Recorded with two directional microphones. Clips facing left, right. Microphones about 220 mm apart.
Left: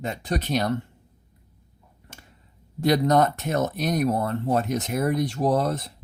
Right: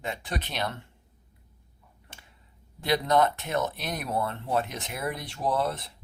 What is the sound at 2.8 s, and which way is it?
Speech, 45° left (ahead or behind).